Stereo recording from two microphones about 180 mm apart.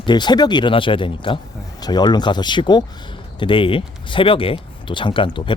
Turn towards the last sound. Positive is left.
turn(degrees=25)  # may be behind; listen again after turning